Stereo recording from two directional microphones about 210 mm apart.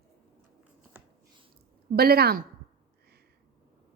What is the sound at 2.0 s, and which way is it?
Speech, 45° right (ahead or behind).